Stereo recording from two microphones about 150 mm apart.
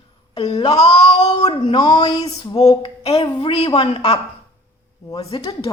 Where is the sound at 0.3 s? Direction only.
35° left (ahead or behind).